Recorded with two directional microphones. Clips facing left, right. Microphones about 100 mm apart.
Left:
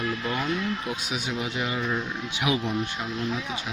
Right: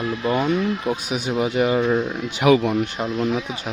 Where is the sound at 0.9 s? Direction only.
50° right (ahead or behind).